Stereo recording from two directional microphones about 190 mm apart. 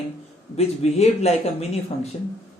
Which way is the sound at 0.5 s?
35° left (ahead or behind).